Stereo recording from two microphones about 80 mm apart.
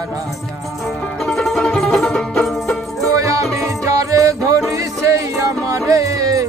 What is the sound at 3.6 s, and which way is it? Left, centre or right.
Music, right.